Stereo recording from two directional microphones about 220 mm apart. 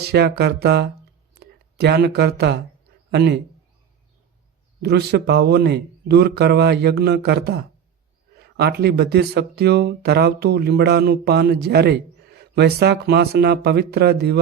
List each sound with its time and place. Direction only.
0.0 s speech: 45° right (ahead or behind)
4.8 s speech: 45° right (ahead or behind)